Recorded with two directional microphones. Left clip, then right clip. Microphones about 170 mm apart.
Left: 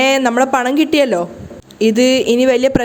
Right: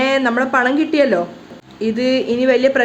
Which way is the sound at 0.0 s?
40° left (ahead or behind).